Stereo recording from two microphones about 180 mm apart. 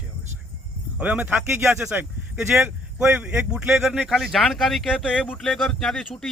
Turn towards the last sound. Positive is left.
turn(degrees=0)  # may be behind; listen again after turning